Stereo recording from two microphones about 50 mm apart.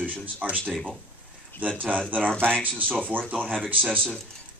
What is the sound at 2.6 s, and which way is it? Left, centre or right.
Speech, right.